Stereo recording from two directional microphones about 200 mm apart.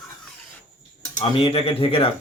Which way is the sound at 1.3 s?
25° left (ahead or behind).